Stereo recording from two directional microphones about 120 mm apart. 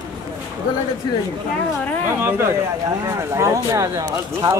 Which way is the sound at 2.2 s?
20° right (ahead or behind).